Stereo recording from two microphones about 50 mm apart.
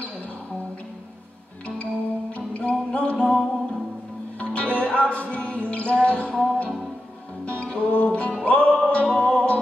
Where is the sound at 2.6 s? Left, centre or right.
Left.